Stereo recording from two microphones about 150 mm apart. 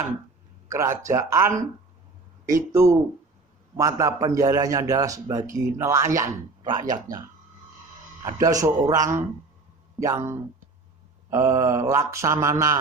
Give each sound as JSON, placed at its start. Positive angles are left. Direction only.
{"t": 0.7, "sound": "a man's voice", "side_deg": -20}